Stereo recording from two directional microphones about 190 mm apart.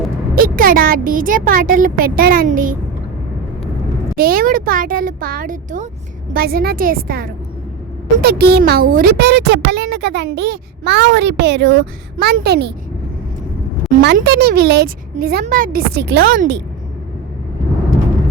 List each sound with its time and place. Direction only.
0.3 s speech: 50° right (ahead or behind)
4.2 s speech: 50° right (ahead or behind)
14.0 s speech: 65° right (ahead or behind)